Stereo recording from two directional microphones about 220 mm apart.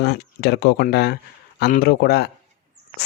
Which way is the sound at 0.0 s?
50° left (ahead or behind).